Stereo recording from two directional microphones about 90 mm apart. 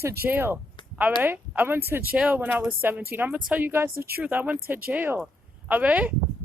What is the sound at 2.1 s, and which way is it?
A woman's voice, 15° right (ahead or behind).